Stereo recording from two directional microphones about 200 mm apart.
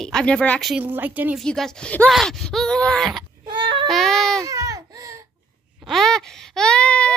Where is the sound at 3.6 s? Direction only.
25° right (ahead or behind).